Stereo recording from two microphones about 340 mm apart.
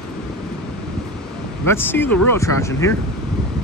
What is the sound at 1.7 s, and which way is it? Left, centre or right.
Speech, centre.